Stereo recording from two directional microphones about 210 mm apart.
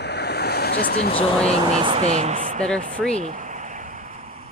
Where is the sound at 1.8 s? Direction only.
25° right (ahead or behind).